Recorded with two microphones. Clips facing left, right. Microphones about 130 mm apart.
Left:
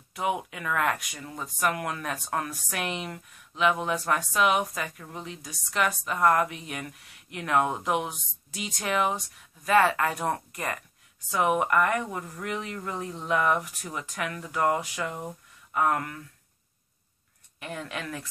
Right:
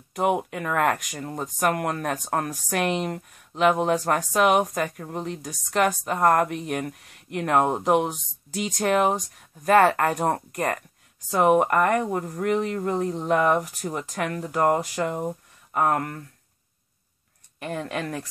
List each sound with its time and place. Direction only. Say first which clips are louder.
0.1 s speech: right 6 dB; 55° right (ahead or behind)
17.6 s speech: right 6 dB; 45° right (ahead or behind)